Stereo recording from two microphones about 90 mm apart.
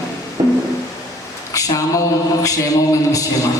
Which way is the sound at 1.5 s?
40° left (ahead or behind).